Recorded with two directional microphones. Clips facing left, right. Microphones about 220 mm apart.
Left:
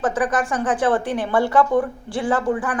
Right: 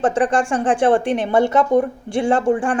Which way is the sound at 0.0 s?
30° right (ahead or behind).